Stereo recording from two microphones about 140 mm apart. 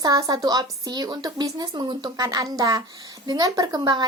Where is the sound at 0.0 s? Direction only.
30° right (ahead or behind).